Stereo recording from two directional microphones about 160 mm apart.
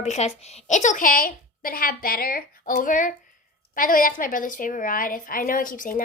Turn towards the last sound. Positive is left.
turn(degrees=60)  # may be behind; listen again after turning